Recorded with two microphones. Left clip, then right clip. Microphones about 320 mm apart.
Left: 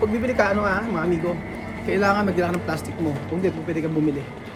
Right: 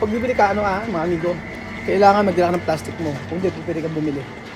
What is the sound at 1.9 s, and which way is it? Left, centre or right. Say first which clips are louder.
Speech: right 7 dB; centre.